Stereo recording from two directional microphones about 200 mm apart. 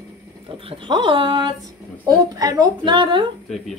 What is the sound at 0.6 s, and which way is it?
Speech, 25° right (ahead or behind).